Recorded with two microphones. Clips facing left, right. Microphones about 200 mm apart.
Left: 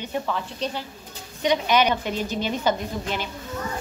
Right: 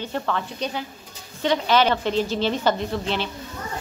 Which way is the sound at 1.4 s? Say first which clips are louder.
Right 1 dB; 15° left (ahead or behind).